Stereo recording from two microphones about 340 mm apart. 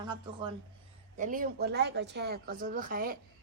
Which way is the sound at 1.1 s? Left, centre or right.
Right.